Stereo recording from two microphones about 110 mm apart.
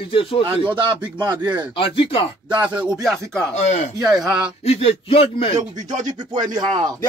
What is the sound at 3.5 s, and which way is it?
Speech, 90° left.